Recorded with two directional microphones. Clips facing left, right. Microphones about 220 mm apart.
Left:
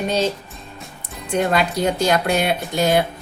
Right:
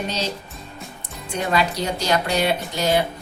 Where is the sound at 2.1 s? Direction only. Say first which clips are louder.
Left 2 dB; 50° left (ahead or behind).